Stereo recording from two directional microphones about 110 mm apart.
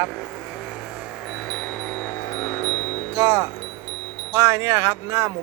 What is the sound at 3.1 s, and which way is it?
Speech, 30° right (ahead or behind).